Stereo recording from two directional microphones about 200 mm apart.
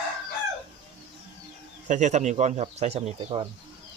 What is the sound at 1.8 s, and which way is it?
Speech, 35° right (ahead or behind).